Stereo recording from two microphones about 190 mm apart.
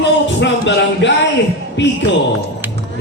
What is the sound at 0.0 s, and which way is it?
Music, 70° left (ahead or behind).